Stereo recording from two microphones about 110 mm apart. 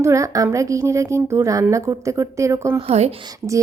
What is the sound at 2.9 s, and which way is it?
Speech, 65° right (ahead or behind).